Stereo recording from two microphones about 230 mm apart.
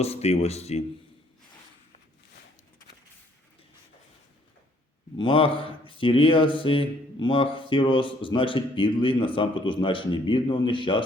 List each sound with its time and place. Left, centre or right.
0.0 s speech: left
5.1 s speech: left